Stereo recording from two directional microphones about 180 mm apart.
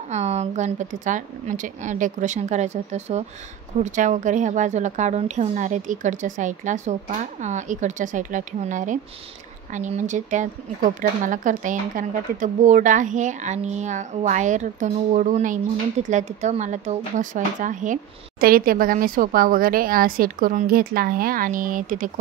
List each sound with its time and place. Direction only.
0.1 s speech: 40° right (ahead or behind)